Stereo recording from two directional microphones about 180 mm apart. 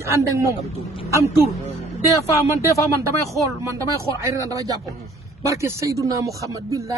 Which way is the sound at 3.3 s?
15° right (ahead or behind).